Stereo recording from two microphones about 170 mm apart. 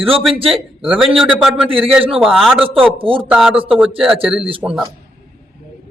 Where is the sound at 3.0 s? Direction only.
30° right (ahead or behind).